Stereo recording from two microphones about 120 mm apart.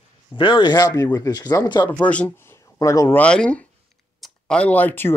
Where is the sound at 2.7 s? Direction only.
25° left (ahead or behind).